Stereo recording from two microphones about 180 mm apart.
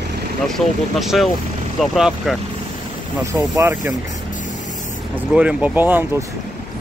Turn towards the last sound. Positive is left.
turn(degrees=-10)  # may be behind; listen again after turning